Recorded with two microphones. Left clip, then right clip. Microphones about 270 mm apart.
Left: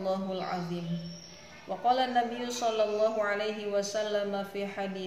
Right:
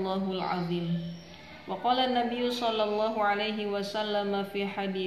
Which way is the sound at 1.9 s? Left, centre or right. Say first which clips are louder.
Even; centre.